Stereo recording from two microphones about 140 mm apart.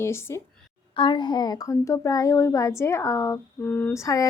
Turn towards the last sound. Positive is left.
turn(degrees=25)  # may be behind; listen again after turning